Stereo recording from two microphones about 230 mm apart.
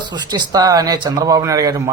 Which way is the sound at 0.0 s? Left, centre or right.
Centre.